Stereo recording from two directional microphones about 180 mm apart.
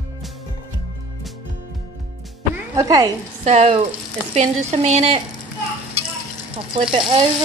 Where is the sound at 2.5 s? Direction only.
20° right (ahead or behind).